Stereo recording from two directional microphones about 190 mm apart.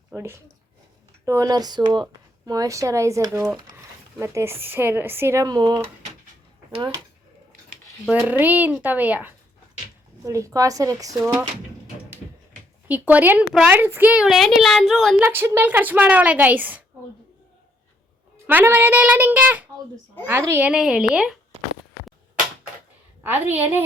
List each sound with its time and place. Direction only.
0.1 s a woman's voice: 10° right (ahead or behind)
8.0 s a woman's voice: 10° right (ahead or behind)
12.9 s a woman's voice: 10° right (ahead or behind)
15.2 s a woman's voice: 10° right (ahead or behind)
18.4 s a woman's voice: 10° right (ahead or behind)
23.2 s a woman's voice: 10° right (ahead or behind)